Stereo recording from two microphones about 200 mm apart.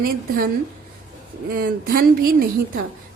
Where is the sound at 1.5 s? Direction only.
45° right (ahead or behind).